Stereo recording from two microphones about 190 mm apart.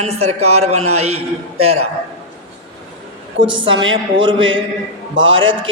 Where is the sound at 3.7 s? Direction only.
85° right.